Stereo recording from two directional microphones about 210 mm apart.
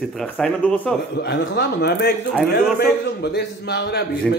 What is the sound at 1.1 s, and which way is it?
Speech, 50° left (ahead or behind).